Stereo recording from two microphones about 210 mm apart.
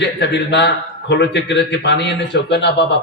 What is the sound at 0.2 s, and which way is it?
A man's voice, 55° left (ahead or behind).